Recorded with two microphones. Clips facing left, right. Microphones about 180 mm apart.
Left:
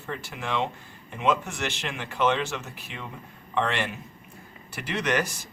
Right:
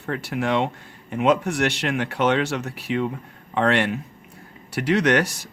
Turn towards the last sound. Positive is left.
turn(degrees=-70)  # may be behind; listen again after turning